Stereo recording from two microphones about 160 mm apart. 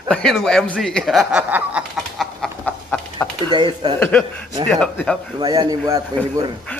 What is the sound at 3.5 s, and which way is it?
Speech, 30° right (ahead or behind).